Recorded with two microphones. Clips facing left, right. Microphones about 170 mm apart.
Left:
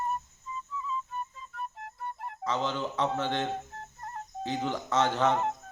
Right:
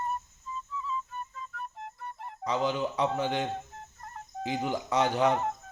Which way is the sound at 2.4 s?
15° right (ahead or behind).